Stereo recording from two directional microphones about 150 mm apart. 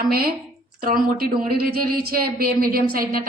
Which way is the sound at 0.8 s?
70° right (ahead or behind).